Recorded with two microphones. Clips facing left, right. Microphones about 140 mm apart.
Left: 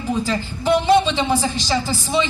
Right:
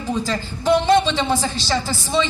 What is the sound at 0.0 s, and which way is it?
A woman's voice, 10° left (ahead or behind).